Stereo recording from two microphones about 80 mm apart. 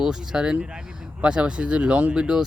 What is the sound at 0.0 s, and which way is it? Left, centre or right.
Speech, centre.